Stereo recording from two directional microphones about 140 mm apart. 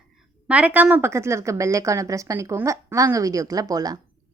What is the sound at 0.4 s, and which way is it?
A woman's voice, 10° right (ahead or behind).